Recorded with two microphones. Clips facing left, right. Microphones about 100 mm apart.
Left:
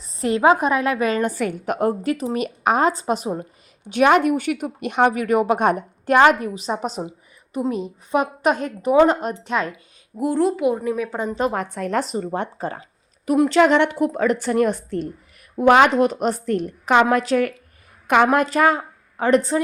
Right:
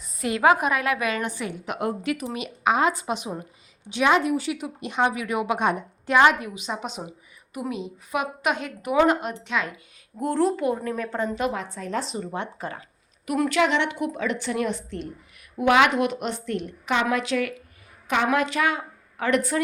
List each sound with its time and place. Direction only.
0.0 s a woman's voice: 35° left (ahead or behind)
3.8 s a woman's voice: 55° left (ahead or behind); by 9.8 s 35° left (ahead or behind)
10.2 s a woman's voice: 5° left (ahead or behind)
11.5 s speech: 55° left (ahead or behind); by 12.8 s 35° left (ahead or behind)
12.8 s a sound: 20° left (ahead or behind)
13.6 s speech: 45° left (ahead or behind)
19.1 s a woman's voice: 30° left (ahead or behind)